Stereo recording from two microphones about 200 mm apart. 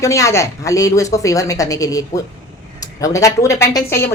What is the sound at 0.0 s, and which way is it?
A man's voice, 15° left (ahead or behind).